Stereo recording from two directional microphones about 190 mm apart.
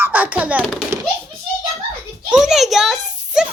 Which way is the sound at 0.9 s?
15° right (ahead or behind).